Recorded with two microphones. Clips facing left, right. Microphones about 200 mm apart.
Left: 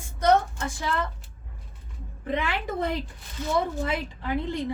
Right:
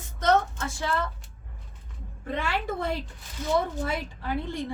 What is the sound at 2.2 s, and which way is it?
A woman's voice, 15° left (ahead or behind).